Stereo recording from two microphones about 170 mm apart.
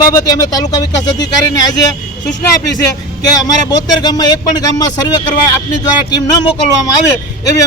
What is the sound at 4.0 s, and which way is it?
Speech, 25° left (ahead or behind).